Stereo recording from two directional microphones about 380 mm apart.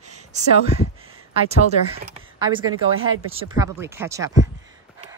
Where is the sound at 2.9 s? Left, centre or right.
Right.